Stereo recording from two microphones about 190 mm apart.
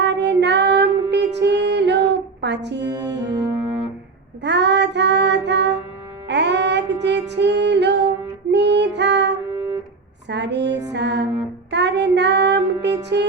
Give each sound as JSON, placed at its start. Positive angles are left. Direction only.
{"t": 0.0, "sound": "female singing", "side_deg": -65}
{"t": 3.2, "sound": "brass instrument", "side_deg": -20}
{"t": 4.4, "sound": "child singing", "side_deg": -65}
{"t": 6.2, "sound": "music", "side_deg": -65}
{"t": 11.7, "sound": "child singing", "side_deg": -65}
{"t": 13.1, "sound": "music", "side_deg": -65}